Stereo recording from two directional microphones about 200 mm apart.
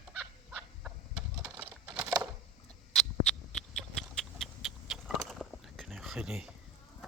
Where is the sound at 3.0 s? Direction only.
5° left (ahead or behind).